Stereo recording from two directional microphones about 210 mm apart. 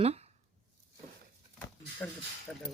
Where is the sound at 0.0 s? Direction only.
30° right (ahead or behind).